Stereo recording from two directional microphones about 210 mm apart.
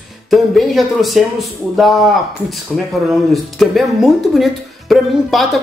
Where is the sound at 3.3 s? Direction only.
Centre (ahead or behind).